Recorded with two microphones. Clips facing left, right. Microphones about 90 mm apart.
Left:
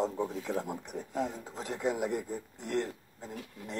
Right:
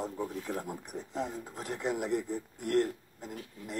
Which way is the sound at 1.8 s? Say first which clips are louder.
Even; 15° left (ahead or behind).